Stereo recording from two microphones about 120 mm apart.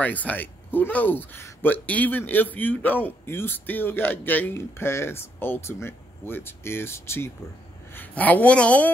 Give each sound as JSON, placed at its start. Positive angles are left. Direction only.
{"t": 0.0, "sound": "speech", "side_deg": 15}